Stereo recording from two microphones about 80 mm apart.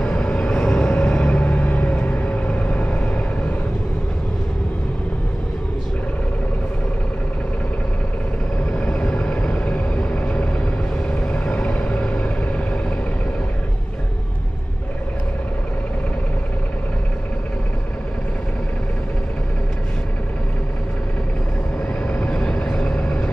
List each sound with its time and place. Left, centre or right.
0.0 s vehicle: centre
8.7 s vehicle: centre
22.1 s vehicle: centre